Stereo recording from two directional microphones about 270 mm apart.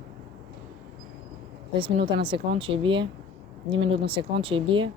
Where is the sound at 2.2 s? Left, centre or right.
Centre.